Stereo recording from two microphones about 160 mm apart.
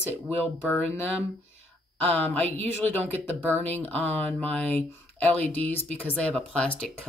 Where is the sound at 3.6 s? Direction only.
10° left (ahead or behind).